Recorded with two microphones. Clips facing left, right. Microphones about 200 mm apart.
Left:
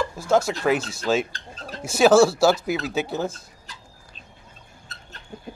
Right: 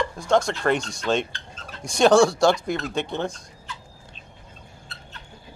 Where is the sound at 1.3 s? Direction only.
35° left (ahead or behind).